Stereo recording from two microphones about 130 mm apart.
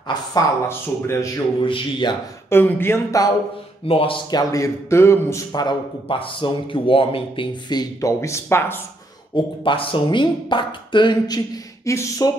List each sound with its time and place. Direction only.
0.1 s a man's voice: 30° left (ahead or behind)
1.6 s speech: 40° left (ahead or behind)
2.5 s speech: 15° left (ahead or behind)
3.8 s speech: 45° left (ahead or behind)
4.4 s a man's voice: 25° left (ahead or behind)
9.3 s speech: 40° left (ahead or behind); by 12.3 s 25° left (ahead or behind)